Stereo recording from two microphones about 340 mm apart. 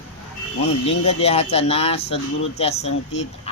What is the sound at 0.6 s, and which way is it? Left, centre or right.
Speech, centre.